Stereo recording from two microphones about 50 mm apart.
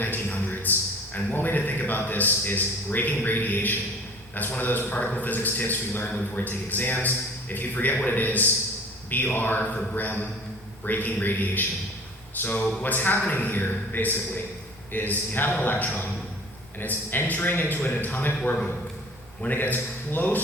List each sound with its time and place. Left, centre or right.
0.0 s a man's voice: left
6.1 s a man's voice: left
19.4 s a man's voice: left